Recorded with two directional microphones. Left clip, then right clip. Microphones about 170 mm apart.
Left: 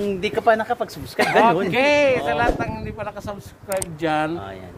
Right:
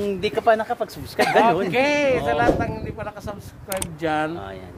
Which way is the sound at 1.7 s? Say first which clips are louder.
Left 2 dB; centre (ahead or behind).